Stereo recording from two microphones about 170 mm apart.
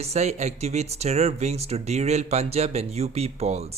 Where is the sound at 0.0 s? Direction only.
40° right (ahead or behind).